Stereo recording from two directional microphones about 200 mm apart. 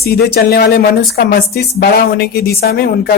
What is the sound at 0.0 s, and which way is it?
A woman's voice, 50° left (ahead or behind).